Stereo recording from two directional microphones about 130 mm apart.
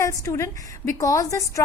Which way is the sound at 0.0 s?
25° left (ahead or behind).